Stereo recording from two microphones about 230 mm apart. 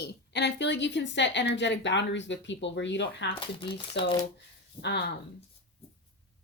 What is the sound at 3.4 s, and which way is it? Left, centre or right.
Speech, left.